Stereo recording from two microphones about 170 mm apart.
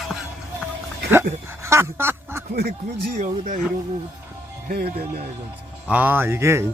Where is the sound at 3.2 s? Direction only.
45° right (ahead or behind).